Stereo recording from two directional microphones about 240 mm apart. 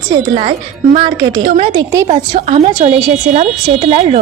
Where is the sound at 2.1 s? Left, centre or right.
Right.